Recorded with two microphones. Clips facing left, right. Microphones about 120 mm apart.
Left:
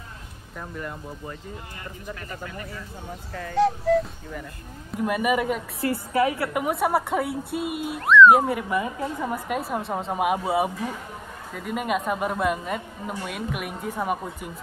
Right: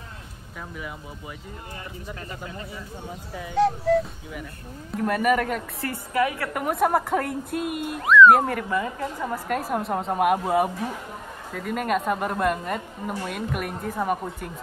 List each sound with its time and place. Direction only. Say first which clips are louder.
0.6 s speech: left 2 dB; 5° right (ahead or behind)
2.4 s speech: left 1 dB; 20° right (ahead or behind)
3.5 s speech: even; centre (ahead or behind)
4.9 s speech: right 1 dB; 10° left (ahead or behind)
5.8 s a woman's voice: left 2 dB; 30° left (ahead or behind)
6.5 s speech: right 1 dB; 5° left (ahead or behind)
9.5 s speech: right 2 dB; centre (ahead or behind)